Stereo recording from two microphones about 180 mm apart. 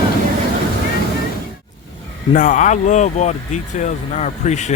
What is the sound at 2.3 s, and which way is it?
Speech, 45° left (ahead or behind).